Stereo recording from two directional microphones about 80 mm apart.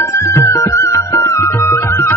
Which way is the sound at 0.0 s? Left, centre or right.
Left.